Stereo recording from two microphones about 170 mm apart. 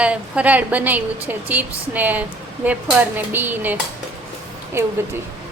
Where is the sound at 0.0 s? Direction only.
5° right (ahead or behind).